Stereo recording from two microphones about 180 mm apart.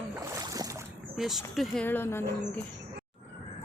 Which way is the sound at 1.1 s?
Centre (ahead or behind).